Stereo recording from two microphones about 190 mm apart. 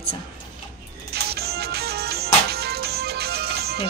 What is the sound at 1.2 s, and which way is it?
Music, 55° right (ahead or behind).